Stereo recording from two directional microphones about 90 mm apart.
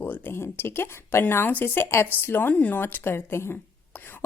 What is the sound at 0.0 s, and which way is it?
A woman's voice, 25° left (ahead or behind).